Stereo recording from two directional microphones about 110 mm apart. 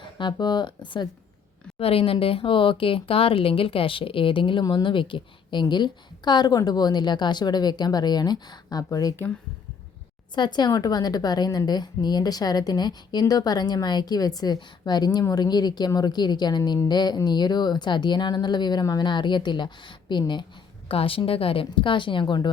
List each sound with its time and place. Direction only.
0.0 s speech: 45° left (ahead or behind)
1.8 s a woman's voice: 60° left (ahead or behind); by 9.1 s 35° left (ahead or behind)
9.1 s speech: 15° left (ahead or behind)
10.3 s a woman's voice: 40° left (ahead or behind)
20.8 s speech: 55° left (ahead or behind)